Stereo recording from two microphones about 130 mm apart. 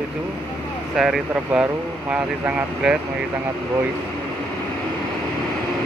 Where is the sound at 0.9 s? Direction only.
5° right (ahead or behind).